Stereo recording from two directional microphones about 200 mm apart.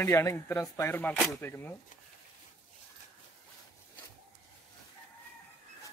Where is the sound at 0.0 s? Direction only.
15° left (ahead or behind).